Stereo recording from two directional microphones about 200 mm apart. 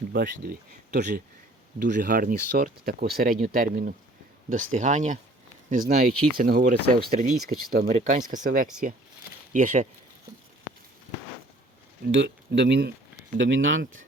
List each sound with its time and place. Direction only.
0.1 s speech: 50° right (ahead or behind)
7.9 s speech: 40° right (ahead or behind)
12.1 s speech: 65° right (ahead or behind)
13.3 s speech: 70° right (ahead or behind)